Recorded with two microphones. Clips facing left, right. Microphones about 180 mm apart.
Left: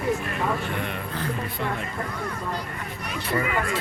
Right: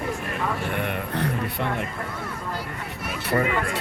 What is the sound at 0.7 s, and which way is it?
Speech, 60° right (ahead or behind).